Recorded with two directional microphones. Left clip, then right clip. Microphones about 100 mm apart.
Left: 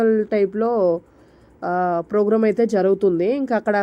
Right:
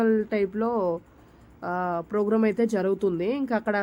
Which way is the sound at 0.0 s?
40° left (ahead or behind).